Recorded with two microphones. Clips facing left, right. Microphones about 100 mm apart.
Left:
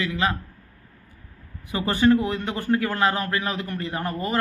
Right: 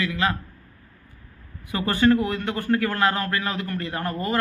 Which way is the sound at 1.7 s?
20° left (ahead or behind).